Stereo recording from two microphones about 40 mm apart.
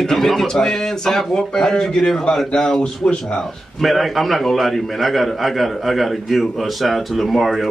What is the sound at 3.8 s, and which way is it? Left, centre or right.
A man's voice, centre.